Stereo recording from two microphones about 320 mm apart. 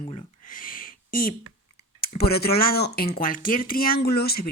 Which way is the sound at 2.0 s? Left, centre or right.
Left.